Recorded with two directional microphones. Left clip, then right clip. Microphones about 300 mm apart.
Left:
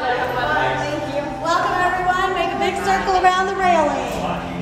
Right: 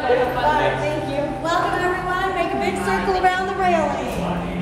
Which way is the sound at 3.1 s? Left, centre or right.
Left.